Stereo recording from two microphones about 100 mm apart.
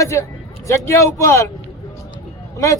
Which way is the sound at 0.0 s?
30° left (ahead or behind).